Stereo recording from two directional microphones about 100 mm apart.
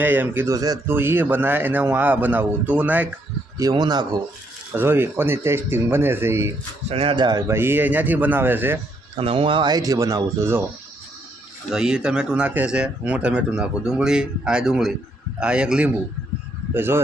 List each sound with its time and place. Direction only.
0.0 s a man's voice: 20° right (ahead or behind)
0.4 s speech: 35° right (ahead or behind)
0.9 s a man's voice: 20° right (ahead or behind)
3.6 s speech: 40° right (ahead or behind)
4.7 s a man's voice: 20° right (ahead or behind)
6.8 s speech: 75° right (ahead or behind)
7.2 s speech: 45° right (ahead or behind)
7.4 s a man's voice: 25° right (ahead or behind)
9.1 s speech: 65° right (ahead or behind); by 10.7 s 25° right (ahead or behind)
11.7 s speech: 5° right (ahead or behind)
16.7 s a man's voice: 20° right (ahead or behind)